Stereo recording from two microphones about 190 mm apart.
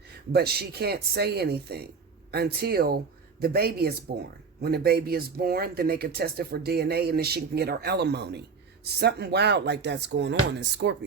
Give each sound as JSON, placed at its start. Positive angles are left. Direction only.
{"t": 0.3, "sound": "speech", "side_deg": -55}